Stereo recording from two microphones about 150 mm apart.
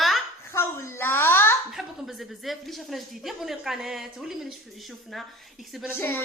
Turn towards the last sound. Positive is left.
turn(degrees=15)  # may be behind; listen again after turning